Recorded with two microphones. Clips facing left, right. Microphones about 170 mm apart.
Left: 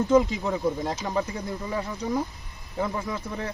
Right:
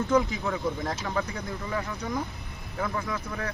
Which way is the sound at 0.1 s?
20° left (ahead or behind).